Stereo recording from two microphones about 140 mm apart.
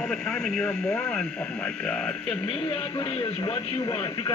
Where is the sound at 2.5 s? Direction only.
35° left (ahead or behind).